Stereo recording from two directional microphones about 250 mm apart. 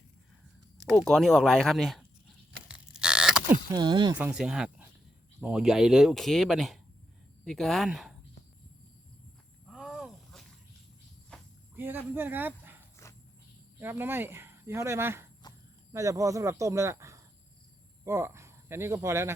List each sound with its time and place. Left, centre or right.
0.8 s speech: centre
2.6 s a sound: centre
3.7 s speech: centre
4.2 s speech: centre
9.6 s a sound: centre
11.3 s insect: centre
11.8 s speech: centre
13.7 s speech: centre